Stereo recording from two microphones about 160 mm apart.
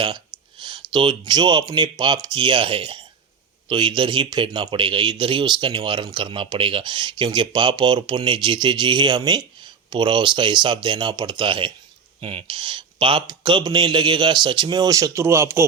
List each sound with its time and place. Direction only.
0.6 s a man's voice: 30° right (ahead or behind)